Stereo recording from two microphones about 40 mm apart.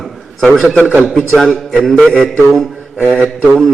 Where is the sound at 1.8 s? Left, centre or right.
Centre.